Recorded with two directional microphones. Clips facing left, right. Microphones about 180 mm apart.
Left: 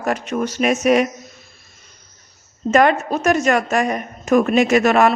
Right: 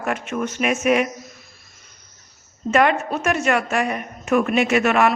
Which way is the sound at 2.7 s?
40° left (ahead or behind).